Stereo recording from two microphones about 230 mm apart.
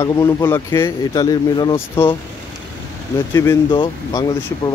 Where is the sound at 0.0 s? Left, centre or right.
Centre.